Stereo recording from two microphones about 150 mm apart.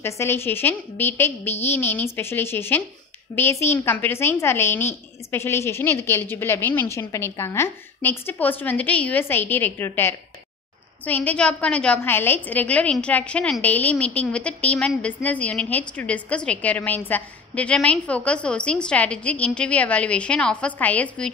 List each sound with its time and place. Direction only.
0.0 s a woman's voice: 15° left (ahead or behind)